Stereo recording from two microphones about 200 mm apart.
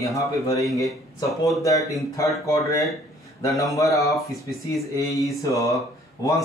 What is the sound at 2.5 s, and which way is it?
Speech, 15° left (ahead or behind).